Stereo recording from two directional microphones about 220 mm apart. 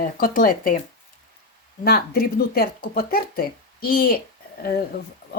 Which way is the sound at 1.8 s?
45° left (ahead or behind).